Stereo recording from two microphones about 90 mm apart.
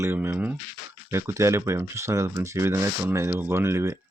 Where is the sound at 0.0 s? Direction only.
25° right (ahead or behind).